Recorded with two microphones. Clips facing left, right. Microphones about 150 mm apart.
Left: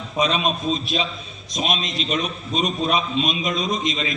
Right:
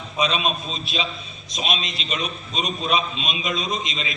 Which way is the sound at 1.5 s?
45° left (ahead or behind).